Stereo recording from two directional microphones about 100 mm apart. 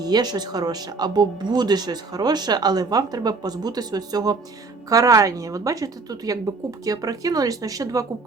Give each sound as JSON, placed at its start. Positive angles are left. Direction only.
{"t": 0.0, "sound": "a woman's voice", "side_deg": -45}